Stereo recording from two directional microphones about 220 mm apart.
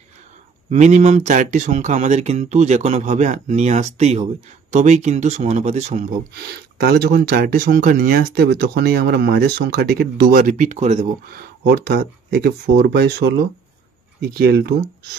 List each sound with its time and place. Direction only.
0.7 s speech: 30° right (ahead or behind)
6.3 s speech: 45° right (ahead or behind)